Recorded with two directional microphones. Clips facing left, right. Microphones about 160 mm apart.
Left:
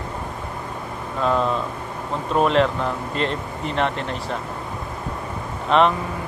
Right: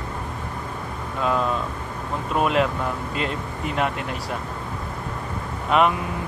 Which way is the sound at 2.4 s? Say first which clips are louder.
Left 3 dB; 5° right (ahead or behind).